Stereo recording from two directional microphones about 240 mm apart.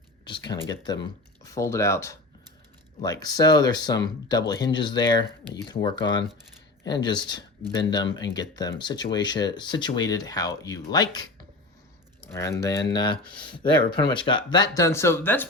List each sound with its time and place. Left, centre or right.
0.3 s speech: centre